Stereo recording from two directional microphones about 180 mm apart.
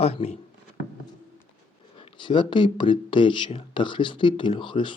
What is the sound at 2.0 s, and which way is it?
Speech, 30° left (ahead or behind).